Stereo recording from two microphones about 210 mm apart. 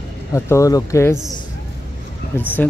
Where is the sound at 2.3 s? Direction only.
10° left (ahead or behind).